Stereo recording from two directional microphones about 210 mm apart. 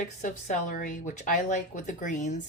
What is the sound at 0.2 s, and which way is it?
A woman's voice, 35° left (ahead or behind).